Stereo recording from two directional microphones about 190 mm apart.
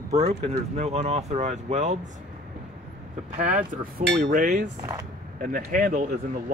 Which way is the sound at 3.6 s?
55° right (ahead or behind).